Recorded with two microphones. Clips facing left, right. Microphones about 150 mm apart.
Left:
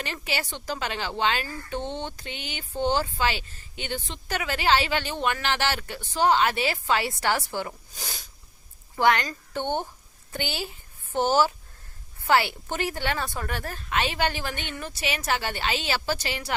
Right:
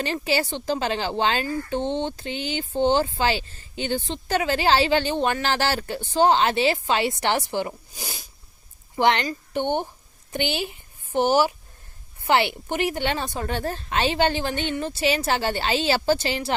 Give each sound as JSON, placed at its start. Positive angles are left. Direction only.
{"t": 0.0, "sound": "speech", "side_deg": -30}
{"t": 9.0, "sound": "a woman's voice", "side_deg": -25}